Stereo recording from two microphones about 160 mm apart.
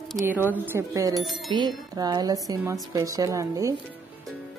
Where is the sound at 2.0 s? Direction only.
25° right (ahead or behind).